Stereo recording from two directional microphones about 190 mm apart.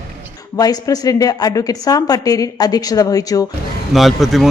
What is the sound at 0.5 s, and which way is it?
A woman's voice, 20° left (ahead or behind).